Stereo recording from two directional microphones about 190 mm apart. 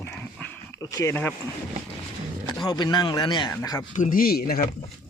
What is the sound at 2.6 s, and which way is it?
Speech, 25° left (ahead or behind).